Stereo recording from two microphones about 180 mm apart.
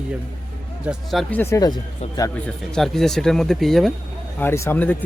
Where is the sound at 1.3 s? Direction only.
15° left (ahead or behind).